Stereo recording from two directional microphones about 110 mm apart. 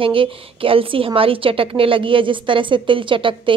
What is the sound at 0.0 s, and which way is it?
A woman's voice, 55° right (ahead or behind).